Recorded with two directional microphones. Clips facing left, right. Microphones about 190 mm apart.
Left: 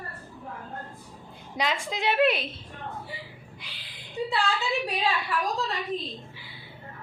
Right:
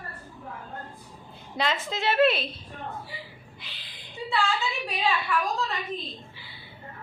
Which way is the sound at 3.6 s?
10° left (ahead or behind).